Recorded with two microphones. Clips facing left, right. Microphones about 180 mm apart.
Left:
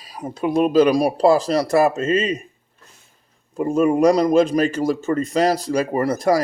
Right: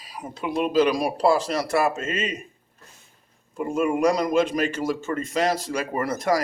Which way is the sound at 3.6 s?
35° left (ahead or behind).